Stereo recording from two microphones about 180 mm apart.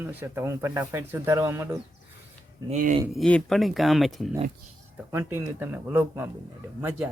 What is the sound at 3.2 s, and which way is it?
Speech, 5° left (ahead or behind).